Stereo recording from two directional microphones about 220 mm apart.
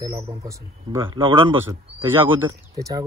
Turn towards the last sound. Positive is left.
turn(degrees=-15)  # may be behind; listen again after turning